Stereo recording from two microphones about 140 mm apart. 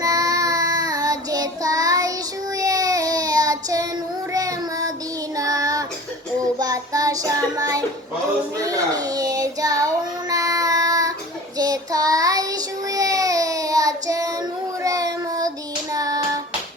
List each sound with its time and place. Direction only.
0.0 s child singing: 25° right (ahead or behind)